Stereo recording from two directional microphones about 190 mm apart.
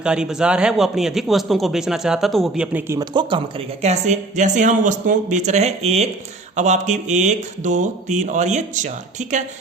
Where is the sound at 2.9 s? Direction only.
25° right (ahead or behind).